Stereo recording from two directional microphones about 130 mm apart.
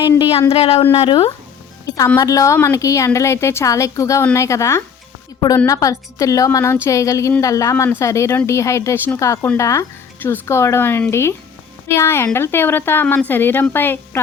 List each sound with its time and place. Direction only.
0.5 s speech: 50° left (ahead or behind)
2.1 s speech: 25° left (ahead or behind)